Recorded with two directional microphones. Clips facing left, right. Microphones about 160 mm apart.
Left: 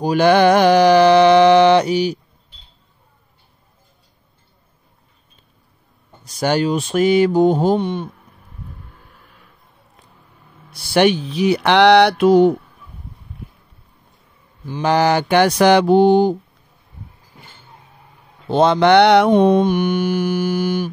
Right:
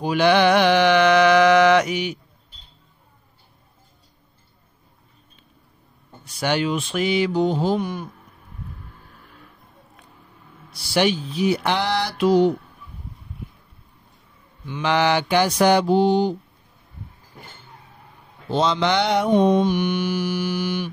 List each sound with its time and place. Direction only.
0.0 s mantra: 40° left (ahead or behind)
6.2 s mantra: 40° left (ahead or behind)
7.7 s speech: 25° left (ahead or behind)
10.7 s speech: 55° left (ahead or behind)
14.7 s mantra: 40° left (ahead or behind)
18.5 s mantra: 55° left (ahead or behind)